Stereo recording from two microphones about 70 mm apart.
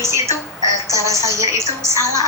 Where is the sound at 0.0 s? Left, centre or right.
Right.